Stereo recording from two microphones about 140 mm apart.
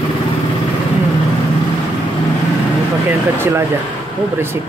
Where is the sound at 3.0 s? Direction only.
15° right (ahead or behind).